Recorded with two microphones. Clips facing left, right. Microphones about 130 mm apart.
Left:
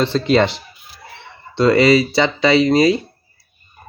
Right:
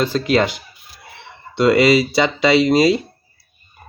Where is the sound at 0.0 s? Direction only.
5° right (ahead or behind).